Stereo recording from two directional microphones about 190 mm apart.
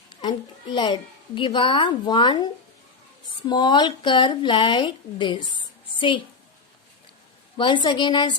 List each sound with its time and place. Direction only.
0.2 s a child's voice: 25° left (ahead or behind)
7.5 s speech: 25° left (ahead or behind)